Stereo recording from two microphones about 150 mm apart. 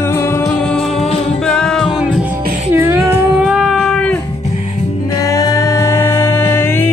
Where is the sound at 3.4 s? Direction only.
5° right (ahead or behind).